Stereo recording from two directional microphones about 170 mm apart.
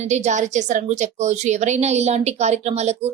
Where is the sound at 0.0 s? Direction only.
40° right (ahead or behind).